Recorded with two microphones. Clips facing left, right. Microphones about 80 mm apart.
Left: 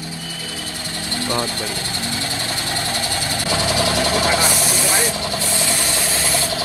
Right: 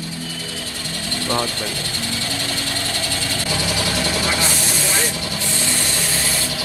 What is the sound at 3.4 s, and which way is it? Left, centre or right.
Vehicle, left.